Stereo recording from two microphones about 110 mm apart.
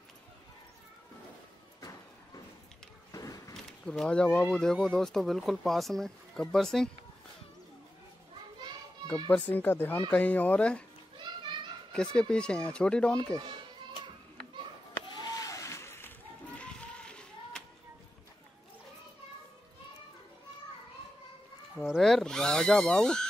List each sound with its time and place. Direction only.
1.8 s a sound: 35° left (ahead or behind)
3.1 s skateboard: 30° left (ahead or behind)
3.8 s speech: 5° left (ahead or behind)
9.3 s speech: 15° left (ahead or behind)
11.1 s children playing: 45° right (ahead or behind)
11.9 s speech: 5° left (ahead or behind)
15.1 s a sound: 35° left (ahead or behind)
16.5 s a sound: 10° left (ahead or behind)
21.8 s speech: centre (ahead or behind)